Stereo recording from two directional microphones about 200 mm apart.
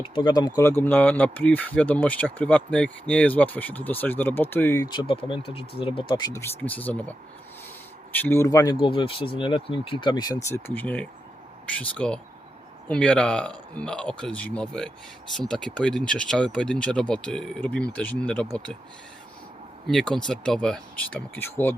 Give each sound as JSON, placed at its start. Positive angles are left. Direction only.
{"t": 0.0, "sound": "speech", "side_deg": 25}
{"t": 8.1, "sound": "speech", "side_deg": 10}
{"t": 10.8, "sound": "speech", "side_deg": 5}
{"t": 19.9, "sound": "speech", "side_deg": 5}